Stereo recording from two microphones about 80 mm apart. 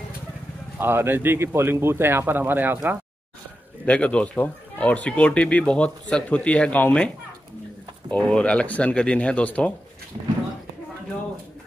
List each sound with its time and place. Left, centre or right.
0.7 s speech: right
3.8 s speech: centre
8.1 s speech: centre